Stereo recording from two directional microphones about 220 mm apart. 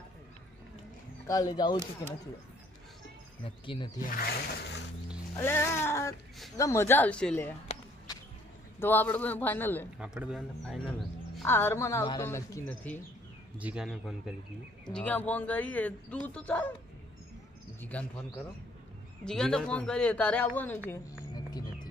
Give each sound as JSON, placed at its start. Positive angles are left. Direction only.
{"t": 1.3, "sound": "speech", "side_deg": 15}
{"t": 3.4, "sound": "speech", "side_deg": 25}
{"t": 4.0, "sound": "speech", "side_deg": 40}
{"t": 5.4, "sound": "speech", "side_deg": 10}
{"t": 8.8, "sound": "speech", "side_deg": 10}
{"t": 10.0, "sound": "speech", "side_deg": -5}
{"t": 11.3, "sound": "speech", "side_deg": 10}
{"t": 13.6, "sound": "speech", "side_deg": -5}
{"t": 17.9, "sound": "speech", "side_deg": 5}
{"t": 19.2, "sound": "speech", "side_deg": 5}